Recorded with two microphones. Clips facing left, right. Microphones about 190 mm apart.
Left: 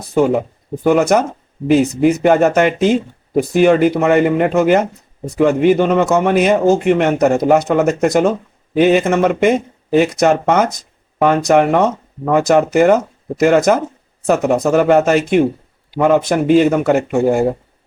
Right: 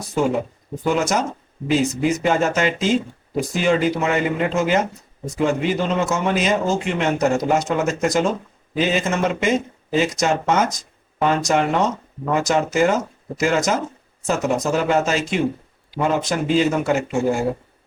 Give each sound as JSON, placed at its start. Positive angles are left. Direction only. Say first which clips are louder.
{"t": 0.0, "sound": "speech", "louder": "left 6 dB", "side_deg": 60}